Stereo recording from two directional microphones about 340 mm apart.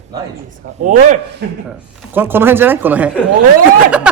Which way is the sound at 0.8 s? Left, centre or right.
Right.